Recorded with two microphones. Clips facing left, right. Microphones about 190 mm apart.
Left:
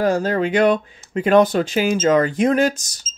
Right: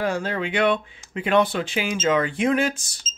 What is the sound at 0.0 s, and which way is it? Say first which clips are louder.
Speech: left 7 dB; 40° left (ahead or behind).